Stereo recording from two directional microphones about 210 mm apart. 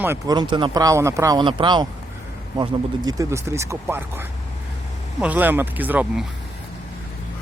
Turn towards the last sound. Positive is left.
turn(degrees=-5)  # may be behind; listen again after turning